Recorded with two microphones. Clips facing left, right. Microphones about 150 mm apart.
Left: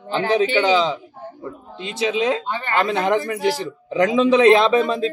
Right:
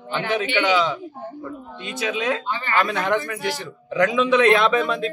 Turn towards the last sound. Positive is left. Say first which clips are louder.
# left 3 dB
turn(degrees=35)  # may be behind; listen again after turning